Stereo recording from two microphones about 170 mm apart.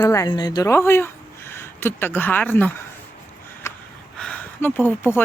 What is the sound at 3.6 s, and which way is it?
Gasp, 15° left (ahead or behind).